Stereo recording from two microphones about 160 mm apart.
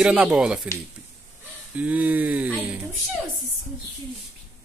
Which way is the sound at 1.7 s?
10° right (ahead or behind).